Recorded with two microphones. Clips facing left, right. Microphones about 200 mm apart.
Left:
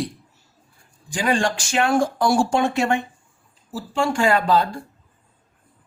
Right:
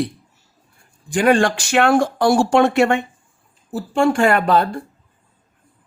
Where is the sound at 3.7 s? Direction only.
55° right (ahead or behind).